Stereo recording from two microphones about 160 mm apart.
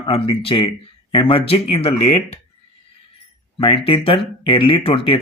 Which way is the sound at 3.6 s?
35° left (ahead or behind).